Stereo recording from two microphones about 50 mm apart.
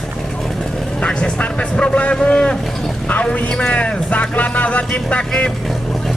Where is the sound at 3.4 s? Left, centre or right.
Left.